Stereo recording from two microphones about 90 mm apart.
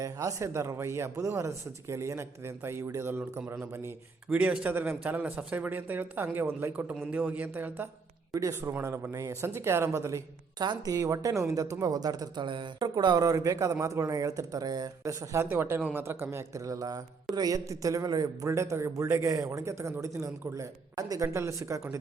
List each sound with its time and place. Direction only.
0.0 s a man's voice: 40° right (ahead or behind)
4.3 s a man's voice: 15° right (ahead or behind)
8.3 s a man's voice: 35° right (ahead or behind)
10.6 s a man's voice: 45° right (ahead or behind)
12.5 s speech: 60° right (ahead or behind)
13.2 s a man's voice: 40° right (ahead or behind)
15.3 s a man's voice: 25° right (ahead or behind); by 18.3 s 45° right (ahead or behind)
18.4 s a man's voice: 35° right (ahead or behind)